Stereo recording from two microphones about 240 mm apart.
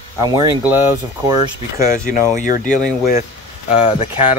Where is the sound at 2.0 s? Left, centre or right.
Left.